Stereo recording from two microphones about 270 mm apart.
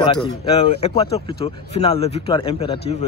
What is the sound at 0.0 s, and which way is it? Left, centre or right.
Speech, centre.